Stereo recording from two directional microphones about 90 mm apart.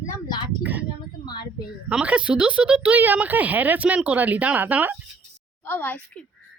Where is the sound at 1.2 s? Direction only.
50° left (ahead or behind).